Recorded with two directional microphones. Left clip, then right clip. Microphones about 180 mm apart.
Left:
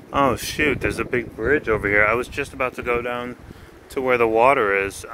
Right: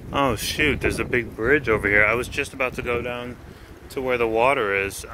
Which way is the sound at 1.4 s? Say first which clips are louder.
Even; centre (ahead or behind).